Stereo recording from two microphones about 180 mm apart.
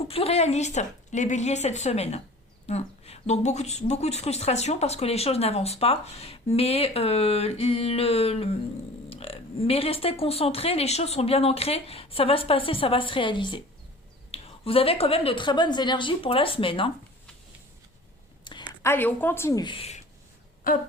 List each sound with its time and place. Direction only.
0.0 s a woman's voice: 35° left (ahead or behind)
18.5 s a sound: 25° left (ahead or behind)
18.8 s a woman's voice: 10° left (ahead or behind); by 20.0 s 30° left (ahead or behind)